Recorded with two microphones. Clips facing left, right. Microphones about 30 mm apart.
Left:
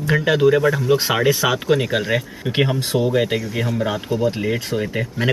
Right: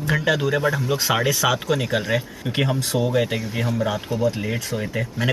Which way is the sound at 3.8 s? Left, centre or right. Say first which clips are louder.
Left 2 dB; centre.